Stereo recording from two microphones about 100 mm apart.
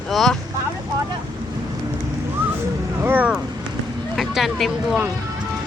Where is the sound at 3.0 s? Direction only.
20° right (ahead or behind).